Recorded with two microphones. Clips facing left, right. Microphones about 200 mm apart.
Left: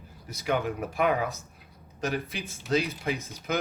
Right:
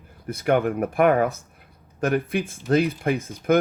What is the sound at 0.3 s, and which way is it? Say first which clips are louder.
Speech: right 7 dB; 55° right (ahead or behind).